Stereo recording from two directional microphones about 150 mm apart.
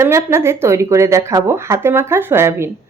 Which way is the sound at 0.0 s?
15° right (ahead or behind).